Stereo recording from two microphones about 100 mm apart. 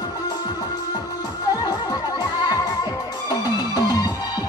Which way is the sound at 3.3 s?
45° left (ahead or behind).